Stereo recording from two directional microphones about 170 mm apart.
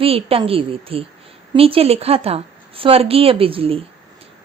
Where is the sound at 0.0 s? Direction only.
35° right (ahead or behind).